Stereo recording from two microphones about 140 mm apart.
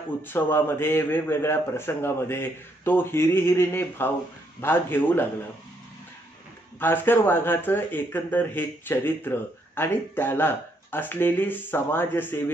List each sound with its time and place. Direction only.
0.3 s speech: 15° left (ahead or behind)
6.8 s speech: 15° left (ahead or behind)